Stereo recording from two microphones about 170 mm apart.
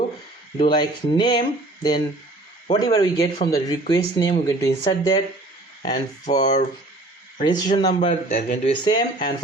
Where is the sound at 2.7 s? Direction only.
20° left (ahead or behind).